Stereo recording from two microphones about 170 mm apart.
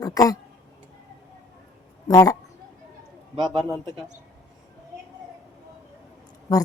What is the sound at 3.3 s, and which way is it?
Speech, 25° right (ahead or behind).